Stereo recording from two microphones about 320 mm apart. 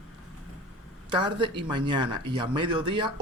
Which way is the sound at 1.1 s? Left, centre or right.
Centre.